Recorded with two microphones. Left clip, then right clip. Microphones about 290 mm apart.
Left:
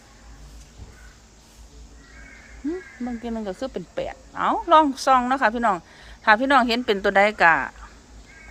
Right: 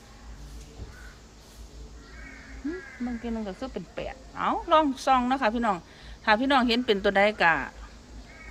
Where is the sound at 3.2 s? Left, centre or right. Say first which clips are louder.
Left 5 dB; left.